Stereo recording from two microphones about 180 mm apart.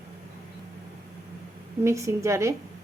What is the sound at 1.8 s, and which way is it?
Speech, 15° right (ahead or behind).